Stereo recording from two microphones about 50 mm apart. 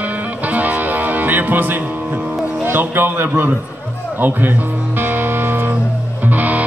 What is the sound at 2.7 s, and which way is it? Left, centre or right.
Speech, right.